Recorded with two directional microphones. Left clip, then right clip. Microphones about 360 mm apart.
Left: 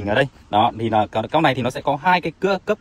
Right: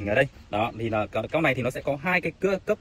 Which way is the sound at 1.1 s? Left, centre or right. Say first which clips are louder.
Left 6 dB; centre.